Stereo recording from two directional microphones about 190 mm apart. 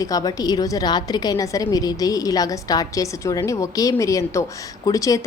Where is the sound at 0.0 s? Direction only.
20° left (ahead or behind).